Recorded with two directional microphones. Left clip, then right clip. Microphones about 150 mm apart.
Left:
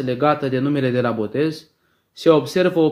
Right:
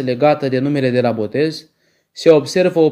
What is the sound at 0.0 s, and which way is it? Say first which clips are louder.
Speech: right 4 dB; 25° right (ahead or behind).